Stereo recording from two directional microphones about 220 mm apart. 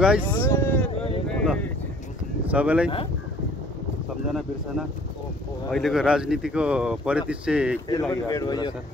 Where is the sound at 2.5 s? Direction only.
5° right (ahead or behind).